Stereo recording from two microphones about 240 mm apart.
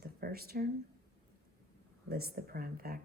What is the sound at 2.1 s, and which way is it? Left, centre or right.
Speech, right.